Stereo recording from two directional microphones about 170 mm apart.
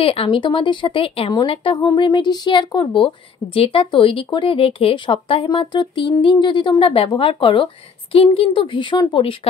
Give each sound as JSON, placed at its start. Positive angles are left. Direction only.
{"t": 0.0, "sound": "speech", "side_deg": 35}